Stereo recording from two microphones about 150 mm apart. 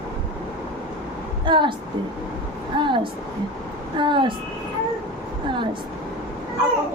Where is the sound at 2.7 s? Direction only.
30° right (ahead or behind).